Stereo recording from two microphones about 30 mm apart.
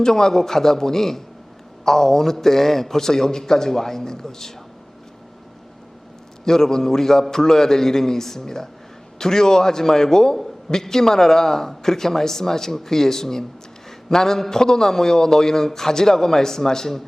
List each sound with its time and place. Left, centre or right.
0.0 s a man's voice: centre
6.4 s a man's voice: centre